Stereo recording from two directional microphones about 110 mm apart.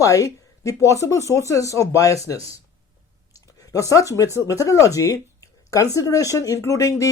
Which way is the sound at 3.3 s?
30° left (ahead or behind).